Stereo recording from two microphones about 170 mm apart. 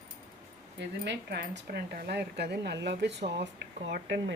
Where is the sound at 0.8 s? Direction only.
85° right.